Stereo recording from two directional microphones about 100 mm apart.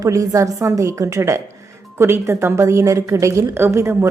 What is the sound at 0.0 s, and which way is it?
A woman's voice, 35° right (ahead or behind).